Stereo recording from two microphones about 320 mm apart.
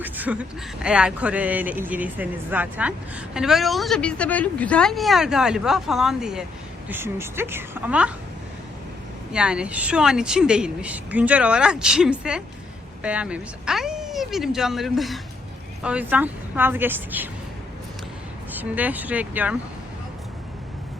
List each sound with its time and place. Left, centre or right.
0.0 s a woman's voice: centre
9.3 s speech: centre
18.5 s speech: centre